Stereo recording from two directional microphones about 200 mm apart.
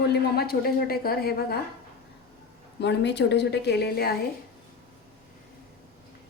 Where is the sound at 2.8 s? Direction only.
60° left (ahead or behind).